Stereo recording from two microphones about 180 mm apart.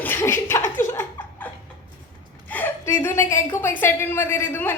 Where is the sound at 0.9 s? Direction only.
10° left (ahead or behind).